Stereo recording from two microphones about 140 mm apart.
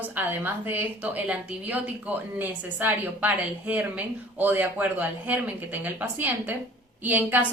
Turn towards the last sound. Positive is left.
turn(degrees=-10)  # may be behind; listen again after turning